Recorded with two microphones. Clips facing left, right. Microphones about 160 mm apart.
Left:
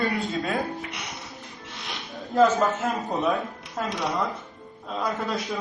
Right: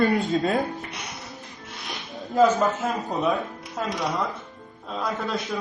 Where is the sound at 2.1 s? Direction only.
Centre (ahead or behind).